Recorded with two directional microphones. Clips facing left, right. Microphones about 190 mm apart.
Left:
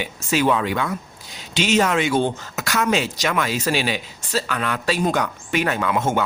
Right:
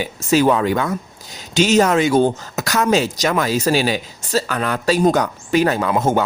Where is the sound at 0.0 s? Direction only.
40° right (ahead or behind).